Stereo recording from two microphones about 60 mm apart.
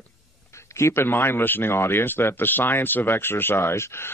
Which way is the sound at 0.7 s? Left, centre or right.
Left.